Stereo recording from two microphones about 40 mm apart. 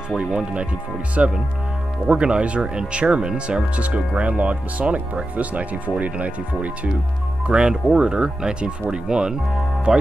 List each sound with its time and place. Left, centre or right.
0.2 s speech: right
7.4 s speech: right